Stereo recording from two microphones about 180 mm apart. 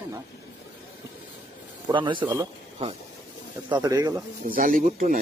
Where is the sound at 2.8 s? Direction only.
35° right (ahead or behind).